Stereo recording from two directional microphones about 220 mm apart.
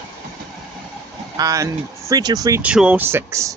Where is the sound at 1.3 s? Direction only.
15° right (ahead or behind).